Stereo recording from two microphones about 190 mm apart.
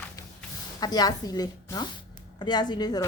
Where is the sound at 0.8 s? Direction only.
20° left (ahead or behind).